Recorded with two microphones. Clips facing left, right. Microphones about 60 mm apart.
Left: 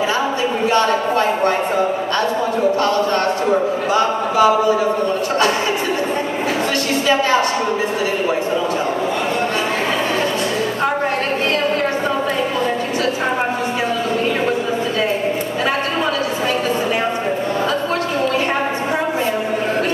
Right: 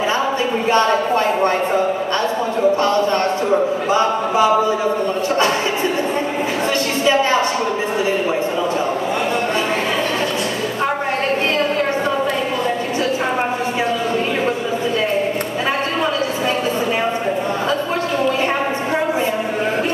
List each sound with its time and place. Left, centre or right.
0.7 s speech: right
3.9 s speech: right